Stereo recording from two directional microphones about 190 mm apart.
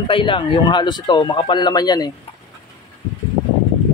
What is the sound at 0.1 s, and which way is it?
Speech, 25° left (ahead or behind).